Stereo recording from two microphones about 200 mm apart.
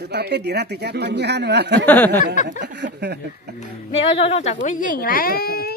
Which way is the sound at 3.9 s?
30° left (ahead or behind).